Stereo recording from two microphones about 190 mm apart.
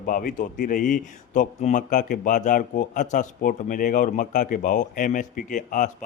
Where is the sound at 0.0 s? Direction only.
45° left (ahead or behind).